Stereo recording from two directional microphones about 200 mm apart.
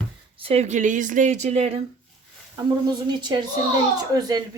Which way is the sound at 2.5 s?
20° right (ahead or behind).